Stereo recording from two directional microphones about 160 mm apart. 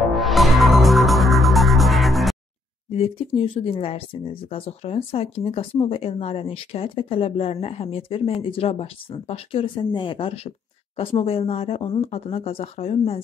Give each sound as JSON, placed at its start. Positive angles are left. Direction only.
{"t": 0.1, "sound": "music", "side_deg": 0}
{"t": 2.9, "sound": "speech", "side_deg": 35}